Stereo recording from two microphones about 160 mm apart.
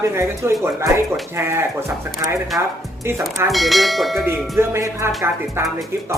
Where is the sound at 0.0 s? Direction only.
15° right (ahead or behind).